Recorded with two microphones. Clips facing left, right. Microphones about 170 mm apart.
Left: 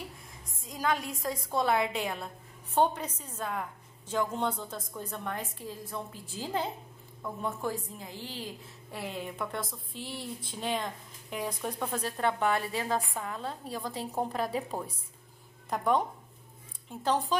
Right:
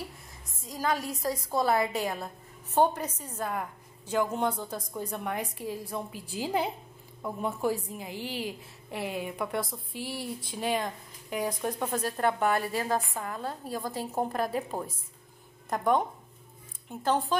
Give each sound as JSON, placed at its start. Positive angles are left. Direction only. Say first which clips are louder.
{"t": 0.7, "sound": "a sound", "louder": "right 1 dB", "side_deg": -5}
{"t": 1.2, "sound": "a woman's voice", "louder": "right 3 dB", "side_deg": -5}
{"t": 17.0, "sound": "speech", "louder": "right 1 dB", "side_deg": -5}